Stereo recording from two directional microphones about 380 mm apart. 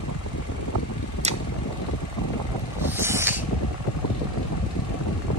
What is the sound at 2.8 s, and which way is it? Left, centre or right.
Boat, centre.